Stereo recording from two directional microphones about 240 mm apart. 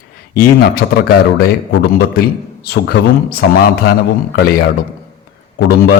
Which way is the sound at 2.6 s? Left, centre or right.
Left.